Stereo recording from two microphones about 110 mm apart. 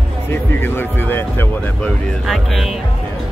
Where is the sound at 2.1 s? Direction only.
Centre (ahead or behind).